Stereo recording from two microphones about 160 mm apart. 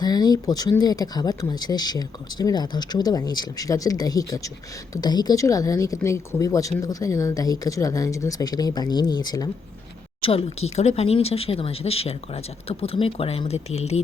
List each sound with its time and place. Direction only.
0.0 s speech: 25° left (ahead or behind)
10.2 s speech: 40° left (ahead or behind)